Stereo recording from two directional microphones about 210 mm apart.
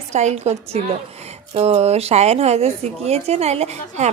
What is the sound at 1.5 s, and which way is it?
A woman's voice, 30° right (ahead or behind).